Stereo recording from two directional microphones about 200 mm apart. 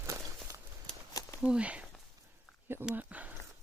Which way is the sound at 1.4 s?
5° right (ahead or behind).